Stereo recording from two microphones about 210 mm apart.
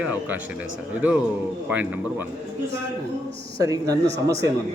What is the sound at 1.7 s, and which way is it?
Speech, 10° right (ahead or behind).